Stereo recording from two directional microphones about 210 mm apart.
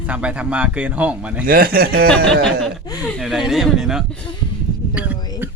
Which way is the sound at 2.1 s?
5° left (ahead or behind).